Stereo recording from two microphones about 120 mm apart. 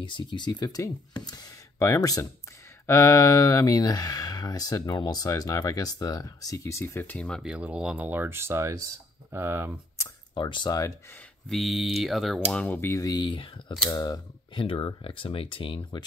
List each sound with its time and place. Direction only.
0.0 s speech: 40° left (ahead or behind); by 7.4 s 10° left (ahead or behind)
7.4 s speech: 10° right (ahead or behind)
10.3 s speech: 40° left (ahead or behind)
11.4 s speech: centre (ahead or behind)
12.5 s speech: 15° left (ahead or behind); by 13.3 s 30° left (ahead or behind)
13.3 s speech: 45° left (ahead or behind)
13.8 s speech: 35° left (ahead or behind)
14.6 s speech: 45° left (ahead or behind)